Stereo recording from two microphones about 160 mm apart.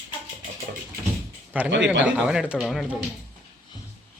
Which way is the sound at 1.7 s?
90° right.